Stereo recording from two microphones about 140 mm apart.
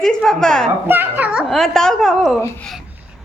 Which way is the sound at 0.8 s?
15° right (ahead or behind).